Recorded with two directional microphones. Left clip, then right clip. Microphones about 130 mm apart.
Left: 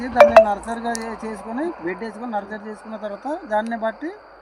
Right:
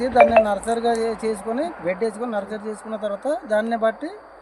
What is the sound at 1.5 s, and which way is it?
Speech, 25° right (ahead or behind).